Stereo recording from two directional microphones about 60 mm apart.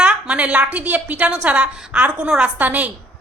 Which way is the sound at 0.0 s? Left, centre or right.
Right.